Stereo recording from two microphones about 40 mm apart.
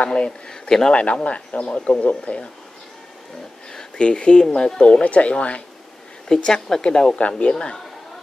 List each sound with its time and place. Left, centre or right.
0.0 s speech: left
0.5 s speech: centre
0.9 s speech: left
4.0 s speech: left
5.0 s speech: left
6.2 s a woman's voice: centre
7.2 s speech: left
7.5 s speech: centre